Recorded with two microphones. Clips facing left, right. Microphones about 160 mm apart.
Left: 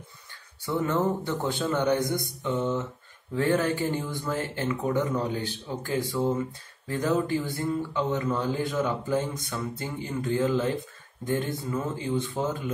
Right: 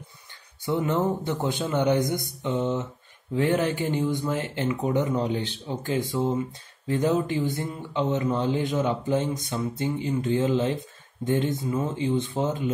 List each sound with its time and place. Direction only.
0.7 s a man's voice: 15° right (ahead or behind)